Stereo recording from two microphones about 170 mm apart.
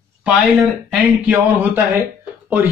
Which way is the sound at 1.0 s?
10° right (ahead or behind).